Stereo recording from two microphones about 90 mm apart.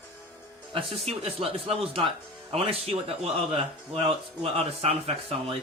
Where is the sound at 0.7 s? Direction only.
90° right.